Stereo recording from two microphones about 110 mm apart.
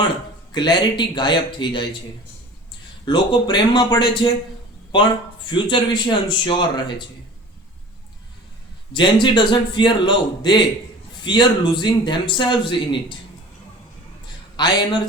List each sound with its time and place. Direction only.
0.5 s a man's voice: 45° left (ahead or behind)
3.1 s a man's voice: 45° left (ahead or behind)
5.5 s a man's voice: 45° left (ahead or behind)
8.9 s a man's voice: 45° left (ahead or behind)
14.5 s a man's voice: 40° left (ahead or behind)